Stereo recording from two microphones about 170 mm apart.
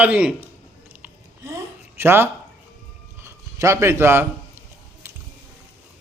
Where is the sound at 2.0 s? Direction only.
15° right (ahead or behind).